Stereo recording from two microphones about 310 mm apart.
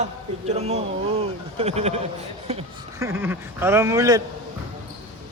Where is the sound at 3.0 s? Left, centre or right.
Centre.